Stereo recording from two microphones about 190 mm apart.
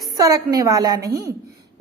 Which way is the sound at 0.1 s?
20° right (ahead or behind).